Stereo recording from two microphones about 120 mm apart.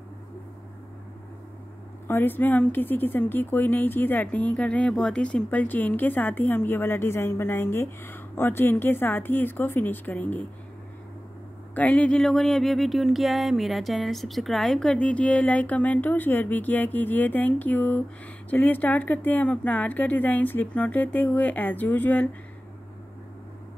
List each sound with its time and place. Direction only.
2.0 s speech: 15° left (ahead or behind)
11.7 s speech: 10° left (ahead or behind)